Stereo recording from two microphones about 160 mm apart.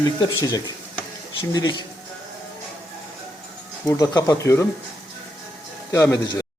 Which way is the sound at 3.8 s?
20° left (ahead or behind).